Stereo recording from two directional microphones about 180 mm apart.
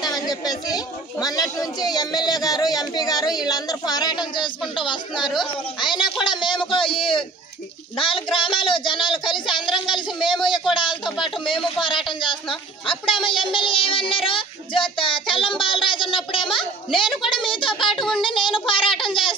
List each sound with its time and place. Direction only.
0.0 s speech: 20° left (ahead or behind)
10.7 s a sound: 25° left (ahead or behind)
11.4 s speech: 30° left (ahead or behind)
18.2 s child singing: 25° left (ahead or behind)